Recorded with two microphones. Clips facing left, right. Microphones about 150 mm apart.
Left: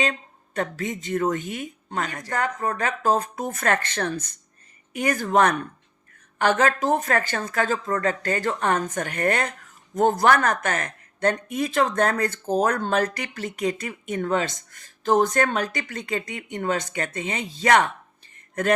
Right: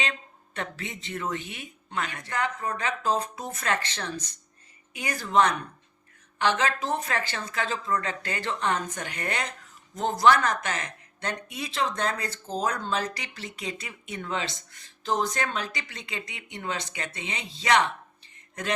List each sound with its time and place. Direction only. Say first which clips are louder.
0.0 s speech: left 7 dB; 40° left (ahead or behind)